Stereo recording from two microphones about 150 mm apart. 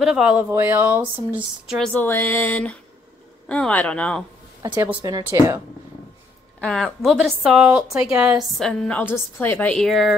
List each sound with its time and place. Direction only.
0.0 s speech: 5° right (ahead or behind)
1.8 s a sound: 10° left (ahead or behind)
4.7 s a woman's voice: 20° right (ahead or behind)
6.6 s a woman's voice: 5° left (ahead or behind)